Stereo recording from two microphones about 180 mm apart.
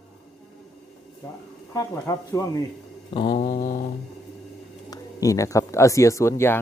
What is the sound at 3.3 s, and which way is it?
Mantra, 50° left (ahead or behind).